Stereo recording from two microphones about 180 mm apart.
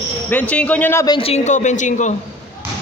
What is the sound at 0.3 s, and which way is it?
Speech, 10° left (ahead or behind).